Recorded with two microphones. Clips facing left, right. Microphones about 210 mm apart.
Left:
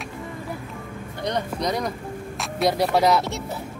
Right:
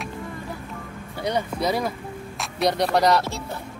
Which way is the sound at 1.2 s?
5° right (ahead or behind).